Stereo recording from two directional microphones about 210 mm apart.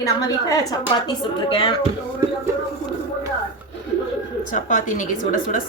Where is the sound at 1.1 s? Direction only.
25° left (ahead or behind).